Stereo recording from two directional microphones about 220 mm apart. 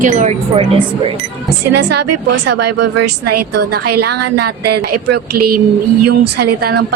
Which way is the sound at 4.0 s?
50° right (ahead or behind).